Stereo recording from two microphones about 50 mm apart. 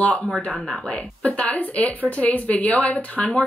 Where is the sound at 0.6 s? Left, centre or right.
Centre.